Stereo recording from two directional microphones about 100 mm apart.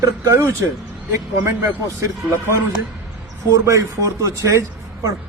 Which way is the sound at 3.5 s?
35° right (ahead or behind).